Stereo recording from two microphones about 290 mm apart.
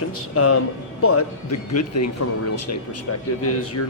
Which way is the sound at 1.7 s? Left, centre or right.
Left.